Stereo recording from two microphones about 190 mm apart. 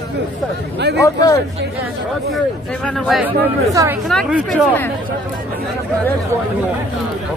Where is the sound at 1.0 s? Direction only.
20° left (ahead or behind).